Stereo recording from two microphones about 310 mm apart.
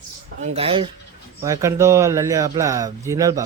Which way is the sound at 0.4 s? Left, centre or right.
Centre.